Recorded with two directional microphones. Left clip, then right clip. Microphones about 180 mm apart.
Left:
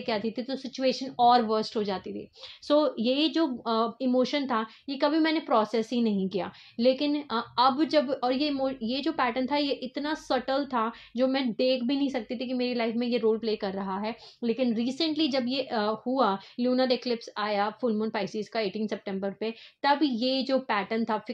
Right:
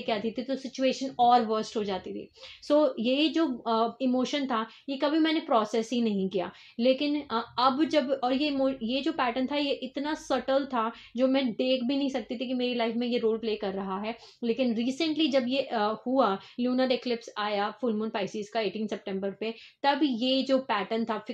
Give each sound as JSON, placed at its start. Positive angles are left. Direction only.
{"t": 0.0, "sound": "speech", "side_deg": 35}